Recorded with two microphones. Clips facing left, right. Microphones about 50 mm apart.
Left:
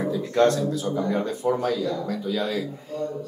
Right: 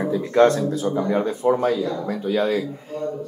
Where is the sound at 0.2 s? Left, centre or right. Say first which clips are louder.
Right 4 dB; right.